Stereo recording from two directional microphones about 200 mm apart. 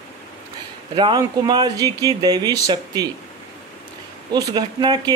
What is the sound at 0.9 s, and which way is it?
A man's voice, 20° right (ahead or behind).